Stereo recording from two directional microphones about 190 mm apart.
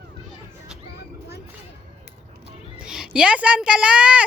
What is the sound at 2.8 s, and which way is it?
Speech, 5° right (ahead or behind).